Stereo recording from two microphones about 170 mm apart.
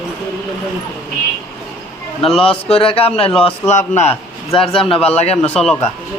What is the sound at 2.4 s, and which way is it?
A man's voice, 35° left (ahead or behind).